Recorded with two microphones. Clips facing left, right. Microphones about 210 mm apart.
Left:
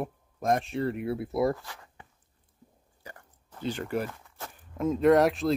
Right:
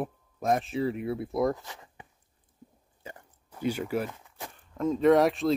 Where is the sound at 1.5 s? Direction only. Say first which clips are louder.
Even; 20° right (ahead or behind).